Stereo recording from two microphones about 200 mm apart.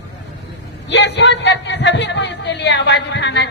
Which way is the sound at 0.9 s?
60° left (ahead or behind).